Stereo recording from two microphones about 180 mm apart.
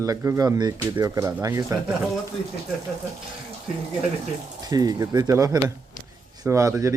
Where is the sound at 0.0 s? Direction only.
15° right (ahead or behind).